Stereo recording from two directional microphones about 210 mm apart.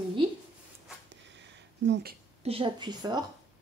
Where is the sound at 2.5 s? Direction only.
25° right (ahead or behind).